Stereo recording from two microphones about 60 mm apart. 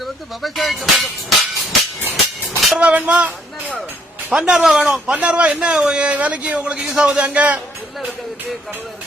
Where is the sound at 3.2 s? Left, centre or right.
Centre; by 5.5 s right.